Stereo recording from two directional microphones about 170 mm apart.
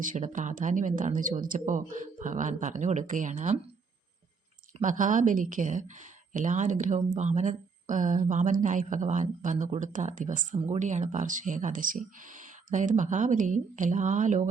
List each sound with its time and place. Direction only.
0.0 s speech: 50° right (ahead or behind)
4.8 s speech: 50° right (ahead or behind)